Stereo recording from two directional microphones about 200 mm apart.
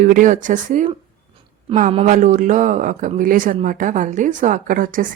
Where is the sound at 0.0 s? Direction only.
40° right (ahead or behind).